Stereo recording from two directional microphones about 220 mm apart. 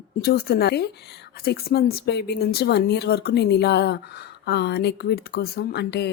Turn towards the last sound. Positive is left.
turn(degrees=50)  # may be behind; listen again after turning